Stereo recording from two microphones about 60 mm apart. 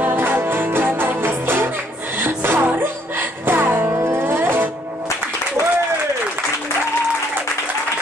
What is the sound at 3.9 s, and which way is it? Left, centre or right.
Music, right.